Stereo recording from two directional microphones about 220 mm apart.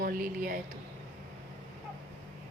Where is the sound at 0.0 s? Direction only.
40° right (ahead or behind).